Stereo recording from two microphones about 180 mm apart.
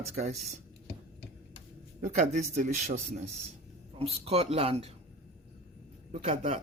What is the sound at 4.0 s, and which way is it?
Speech, 35° right (ahead or behind).